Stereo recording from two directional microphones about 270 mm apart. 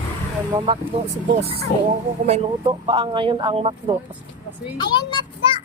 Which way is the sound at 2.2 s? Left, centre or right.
Right.